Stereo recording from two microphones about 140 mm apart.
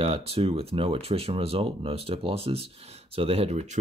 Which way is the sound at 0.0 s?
40° right (ahead or behind).